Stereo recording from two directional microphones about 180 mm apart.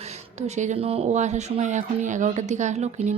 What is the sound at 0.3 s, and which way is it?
A woman's voice, 40° right (ahead or behind).